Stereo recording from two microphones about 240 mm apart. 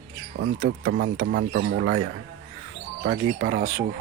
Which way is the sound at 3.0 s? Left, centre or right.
Right.